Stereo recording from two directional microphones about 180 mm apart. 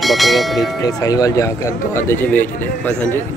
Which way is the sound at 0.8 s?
20° left (ahead or behind).